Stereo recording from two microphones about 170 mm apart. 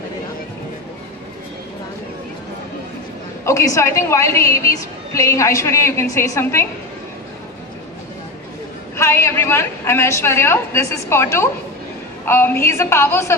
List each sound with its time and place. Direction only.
3.4 s a woman's voice: 15° left (ahead or behind)
8.9 s a woman's voice: 15° left (ahead or behind)